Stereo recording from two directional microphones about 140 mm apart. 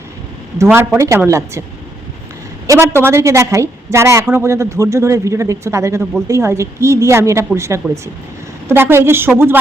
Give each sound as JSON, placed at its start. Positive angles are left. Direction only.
{"t": 0.6, "sound": "a woman's voice", "side_deg": -15}
{"t": 2.6, "sound": "a woman's voice", "side_deg": -15}